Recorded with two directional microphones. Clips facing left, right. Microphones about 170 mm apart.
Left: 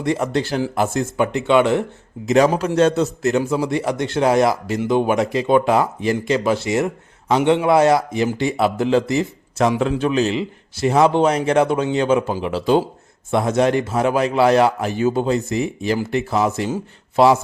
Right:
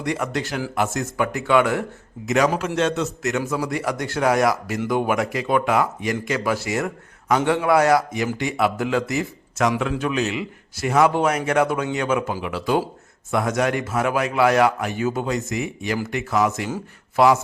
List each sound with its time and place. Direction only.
0.0 s a man's voice: 30° left (ahead or behind)
3.5 s a man's voice: 20° left (ahead or behind)